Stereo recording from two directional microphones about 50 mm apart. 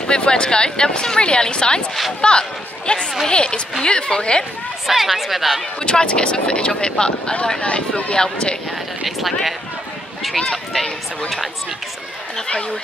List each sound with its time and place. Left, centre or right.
0.0 s speech: centre
4.8 s speech: centre
5.8 s speech: centre
9.0 s speech: centre
12.4 s speech: centre